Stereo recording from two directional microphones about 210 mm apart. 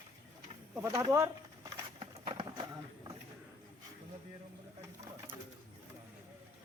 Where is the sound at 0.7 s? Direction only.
10° right (ahead or behind).